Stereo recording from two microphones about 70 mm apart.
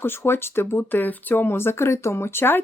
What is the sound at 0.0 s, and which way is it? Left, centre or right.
Speech, left.